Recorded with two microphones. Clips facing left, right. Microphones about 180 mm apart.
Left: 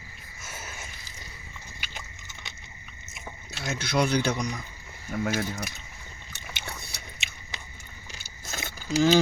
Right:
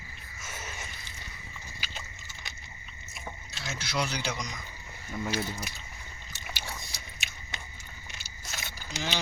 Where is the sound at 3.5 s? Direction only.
55° left (ahead or behind).